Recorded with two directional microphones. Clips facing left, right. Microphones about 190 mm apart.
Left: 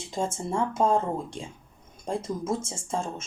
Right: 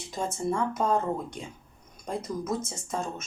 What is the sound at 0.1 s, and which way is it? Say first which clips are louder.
Speech: even; 25° left (ahead or behind).